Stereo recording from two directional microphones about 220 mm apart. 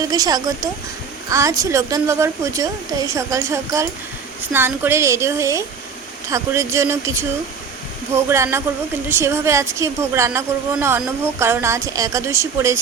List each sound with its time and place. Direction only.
0.0 s a woman's voice: 15° right (ahead or behind)